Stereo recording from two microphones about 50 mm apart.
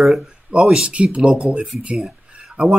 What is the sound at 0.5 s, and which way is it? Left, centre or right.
Speech, centre.